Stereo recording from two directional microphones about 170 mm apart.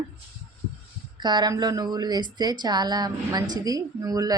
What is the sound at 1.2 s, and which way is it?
A woman's voice, 25° right (ahead or behind).